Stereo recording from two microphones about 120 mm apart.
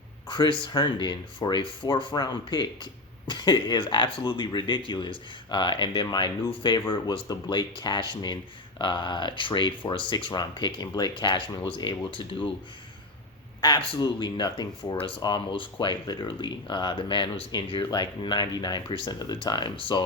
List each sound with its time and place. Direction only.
0.3 s speech: 40° left (ahead or behind)
13.6 s speech: 40° left (ahead or behind)